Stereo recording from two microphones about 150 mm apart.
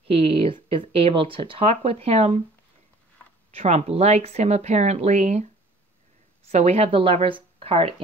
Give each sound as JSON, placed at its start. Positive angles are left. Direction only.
{"t": 0.1, "sound": "speech", "side_deg": -40}
{"t": 3.5, "sound": "speech", "side_deg": -45}